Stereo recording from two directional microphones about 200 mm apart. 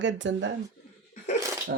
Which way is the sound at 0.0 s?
65° right (ahead or behind).